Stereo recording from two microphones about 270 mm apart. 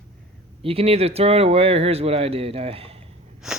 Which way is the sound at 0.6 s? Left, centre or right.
Right.